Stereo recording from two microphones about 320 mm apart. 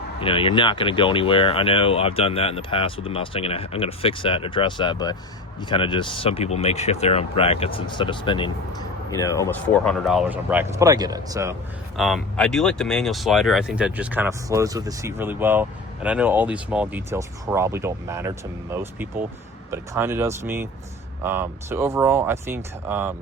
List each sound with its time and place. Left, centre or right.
0.2 s speech: centre
11.9 s speech: centre